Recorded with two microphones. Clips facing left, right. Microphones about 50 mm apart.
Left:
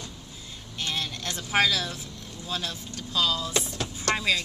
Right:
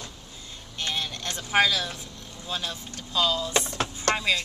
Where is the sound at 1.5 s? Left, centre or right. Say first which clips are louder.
Right 2 dB; centre.